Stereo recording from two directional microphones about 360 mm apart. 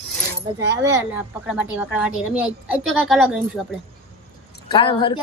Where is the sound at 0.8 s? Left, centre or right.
Centre.